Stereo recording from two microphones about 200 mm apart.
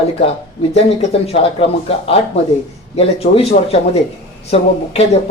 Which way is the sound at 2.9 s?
30° left (ahead or behind).